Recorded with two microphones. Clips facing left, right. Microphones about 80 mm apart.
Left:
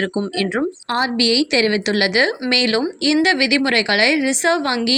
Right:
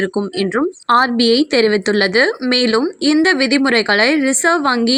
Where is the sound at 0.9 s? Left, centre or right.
Right.